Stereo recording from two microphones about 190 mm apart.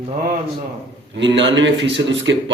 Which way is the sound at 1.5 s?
70° right (ahead or behind).